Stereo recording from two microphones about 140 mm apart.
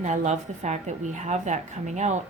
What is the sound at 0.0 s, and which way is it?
A woman's voice, 55° right (ahead or behind).